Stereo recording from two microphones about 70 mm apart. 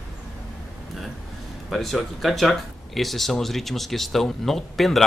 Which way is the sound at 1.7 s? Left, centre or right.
Centre.